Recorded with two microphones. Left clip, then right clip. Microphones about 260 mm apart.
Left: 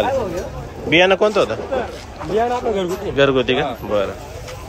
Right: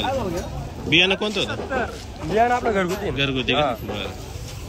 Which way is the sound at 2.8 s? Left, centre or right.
Centre.